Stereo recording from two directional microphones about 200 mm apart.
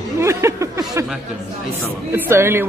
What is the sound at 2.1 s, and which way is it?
Speech, 10° right (ahead or behind).